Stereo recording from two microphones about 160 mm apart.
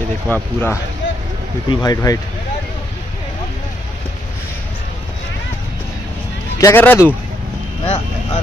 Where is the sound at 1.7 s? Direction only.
25° left (ahead or behind).